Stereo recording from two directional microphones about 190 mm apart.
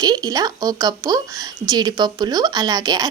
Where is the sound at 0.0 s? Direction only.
20° right (ahead or behind).